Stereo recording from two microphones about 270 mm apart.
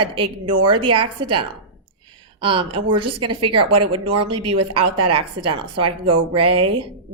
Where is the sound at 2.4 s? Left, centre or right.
Centre.